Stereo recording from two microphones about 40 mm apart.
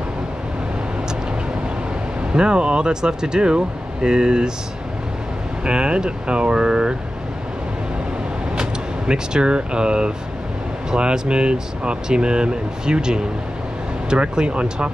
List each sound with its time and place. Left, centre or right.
2.3 s speech: right
5.7 s speech: right
8.5 s speech: right